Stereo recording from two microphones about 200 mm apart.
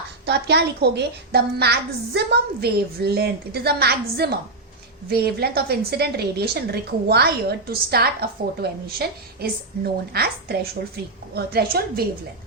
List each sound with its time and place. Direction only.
0.3 s a child's voice: 55° right (ahead or behind)